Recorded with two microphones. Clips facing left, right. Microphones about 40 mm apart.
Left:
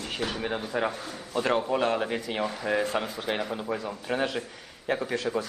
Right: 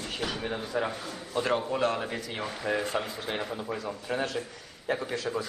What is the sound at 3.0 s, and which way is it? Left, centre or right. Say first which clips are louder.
Speech: left 3 dB; left.